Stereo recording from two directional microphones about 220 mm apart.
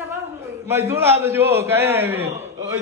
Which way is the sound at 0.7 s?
10° right (ahead or behind).